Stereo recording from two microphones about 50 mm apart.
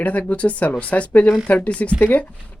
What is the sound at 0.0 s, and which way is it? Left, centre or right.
Speech, left.